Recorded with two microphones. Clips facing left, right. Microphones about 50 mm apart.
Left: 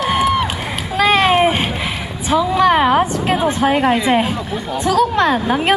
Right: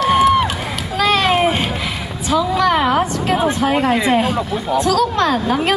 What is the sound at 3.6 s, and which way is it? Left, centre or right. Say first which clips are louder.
A woman's voice: left 2 dB; centre.